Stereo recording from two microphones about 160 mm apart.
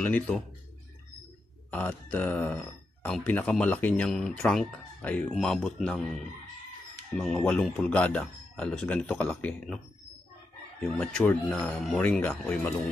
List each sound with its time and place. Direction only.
0.0 s speech: 10° left (ahead or behind)
1.7 s speech: 10° left (ahead or behind)
10.8 s speech: 5° left (ahead or behind)